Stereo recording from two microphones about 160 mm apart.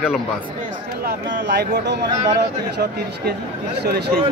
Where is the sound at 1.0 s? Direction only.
80° right.